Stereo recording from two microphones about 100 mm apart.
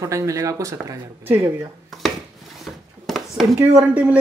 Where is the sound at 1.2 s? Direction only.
20° right (ahead or behind).